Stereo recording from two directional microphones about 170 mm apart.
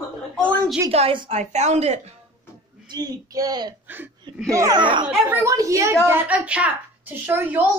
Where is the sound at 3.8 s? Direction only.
10° right (ahead or behind); by 5.0 s 25° right (ahead or behind).